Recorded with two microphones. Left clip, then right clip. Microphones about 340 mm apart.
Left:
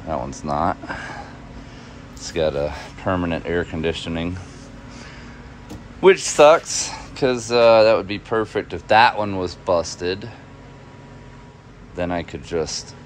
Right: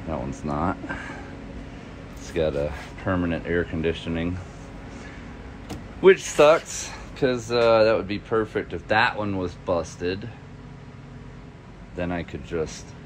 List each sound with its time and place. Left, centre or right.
0.5 s speech: centre
2.2 s speech: centre
5.9 s speech: centre
12.0 s speech: centre